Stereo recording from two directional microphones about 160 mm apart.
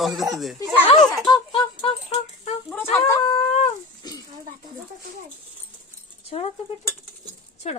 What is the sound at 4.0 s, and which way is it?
Speech, 25° left (ahead or behind).